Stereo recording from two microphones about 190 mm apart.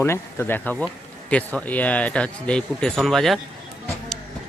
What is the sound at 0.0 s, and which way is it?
Speech, 10° left (ahead or behind).